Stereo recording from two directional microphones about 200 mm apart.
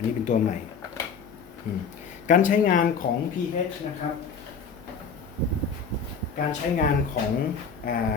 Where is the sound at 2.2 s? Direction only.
40° left (ahead or behind).